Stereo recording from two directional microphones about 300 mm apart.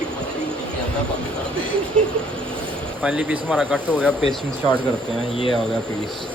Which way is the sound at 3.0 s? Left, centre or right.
Centre.